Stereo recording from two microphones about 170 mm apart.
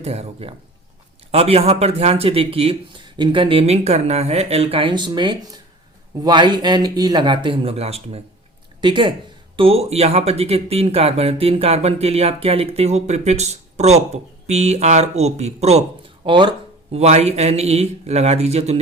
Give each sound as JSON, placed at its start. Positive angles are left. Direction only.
{"t": 0.0, "sound": "speech", "side_deg": -35}